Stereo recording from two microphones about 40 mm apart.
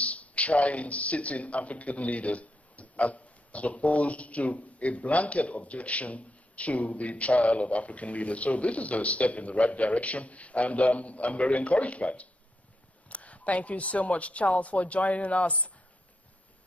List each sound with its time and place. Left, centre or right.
0.0 s speech: left